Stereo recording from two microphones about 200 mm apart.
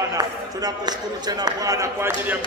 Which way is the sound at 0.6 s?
20° right (ahead or behind).